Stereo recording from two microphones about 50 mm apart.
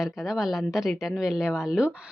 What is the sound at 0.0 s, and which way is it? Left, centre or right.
Speech, centre.